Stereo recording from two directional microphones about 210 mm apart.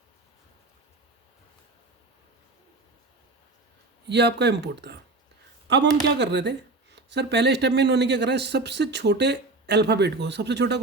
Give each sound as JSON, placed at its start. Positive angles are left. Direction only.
{"t": 4.0, "sound": "speech", "side_deg": -55}